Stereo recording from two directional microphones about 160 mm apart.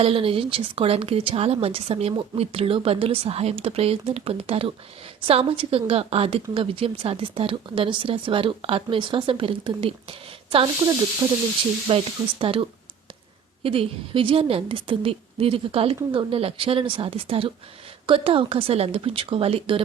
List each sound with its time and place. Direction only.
0.0 s a woman's voice: 35° right (ahead or behind)
11.9 s a woman's voice: 35° right (ahead or behind)